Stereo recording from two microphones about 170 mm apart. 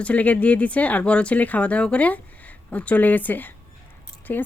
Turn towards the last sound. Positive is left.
turn(degrees=10)  # may be behind; listen again after turning